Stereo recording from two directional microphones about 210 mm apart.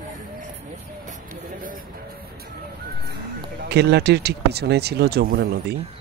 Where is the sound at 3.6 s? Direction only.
50° right (ahead or behind).